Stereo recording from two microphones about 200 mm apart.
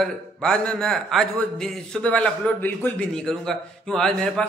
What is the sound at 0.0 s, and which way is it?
A man's voice, 5° left (ahead or behind).